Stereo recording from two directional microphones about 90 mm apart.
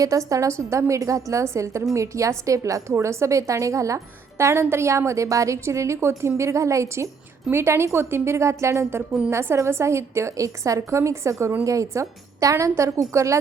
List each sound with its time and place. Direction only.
0.0 s a woman's voice: 40° right (ahead or behind)